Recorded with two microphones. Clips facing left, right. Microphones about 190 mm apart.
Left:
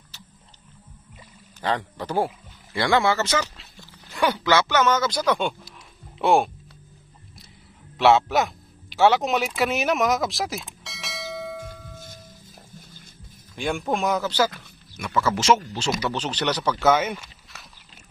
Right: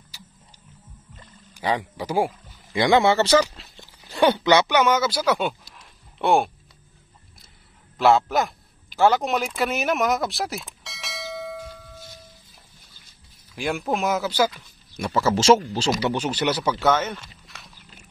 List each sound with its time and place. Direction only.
0.1 s music: 10° right (ahead or behind)
1.6 s speech: 10° right (ahead or behind)
8.0 s a sound: centre (ahead or behind)
13.6 s speech: centre (ahead or behind)
15.0 s speech: 30° right (ahead or behind)
16.1 s speech: 10° right (ahead or behind)
16.8 s speech: 10° left (ahead or behind)